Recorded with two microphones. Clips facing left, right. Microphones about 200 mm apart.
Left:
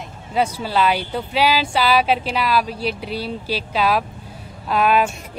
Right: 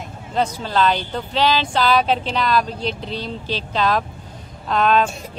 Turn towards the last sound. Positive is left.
turn(degrees=10)  # may be behind; listen again after turning